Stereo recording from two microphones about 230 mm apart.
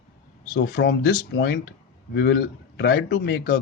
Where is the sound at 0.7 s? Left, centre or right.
Left.